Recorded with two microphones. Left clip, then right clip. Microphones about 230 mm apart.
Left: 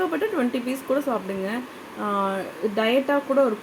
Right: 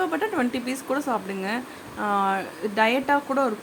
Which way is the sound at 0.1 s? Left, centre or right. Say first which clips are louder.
Left 1 dB; centre.